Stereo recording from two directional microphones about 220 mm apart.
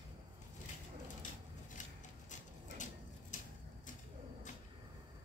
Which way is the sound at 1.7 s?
35° left (ahead or behind).